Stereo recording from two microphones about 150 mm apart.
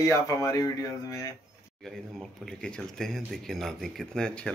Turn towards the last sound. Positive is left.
turn(degrees=5)  # may be behind; listen again after turning